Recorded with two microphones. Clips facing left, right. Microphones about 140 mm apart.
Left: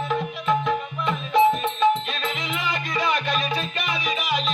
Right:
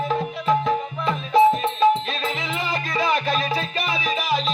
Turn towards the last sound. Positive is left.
turn(degrees=-30)  # may be behind; listen again after turning